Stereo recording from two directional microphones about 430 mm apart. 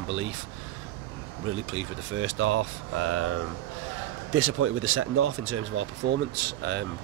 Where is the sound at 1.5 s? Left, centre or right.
Right.